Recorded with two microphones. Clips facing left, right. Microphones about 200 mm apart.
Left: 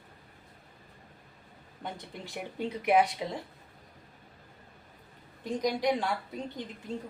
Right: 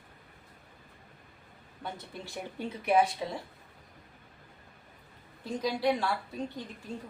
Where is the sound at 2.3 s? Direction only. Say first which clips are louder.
Left 3 dB; 15° left (ahead or behind).